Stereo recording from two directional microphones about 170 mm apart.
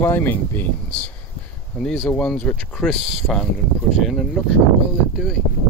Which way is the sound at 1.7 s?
Centre (ahead or behind).